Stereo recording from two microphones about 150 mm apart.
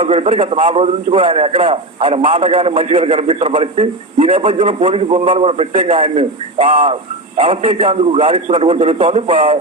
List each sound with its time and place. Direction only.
0.0 s a man's voice: 40° right (ahead or behind)